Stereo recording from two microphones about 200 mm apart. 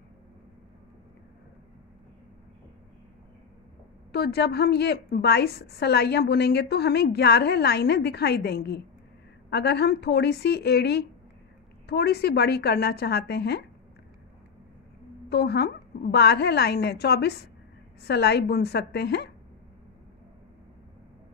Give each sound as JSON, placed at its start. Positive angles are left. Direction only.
{"t": 4.1, "sound": "a woman's voice", "side_deg": 55}
{"t": 15.2, "sound": "a woman's voice", "side_deg": 55}